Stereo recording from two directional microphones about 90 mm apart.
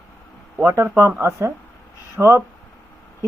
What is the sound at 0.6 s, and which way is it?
Speech, 30° right (ahead or behind).